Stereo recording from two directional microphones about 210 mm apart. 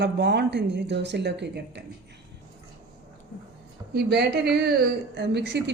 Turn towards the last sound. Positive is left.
turn(degrees=-55)  # may be behind; listen again after turning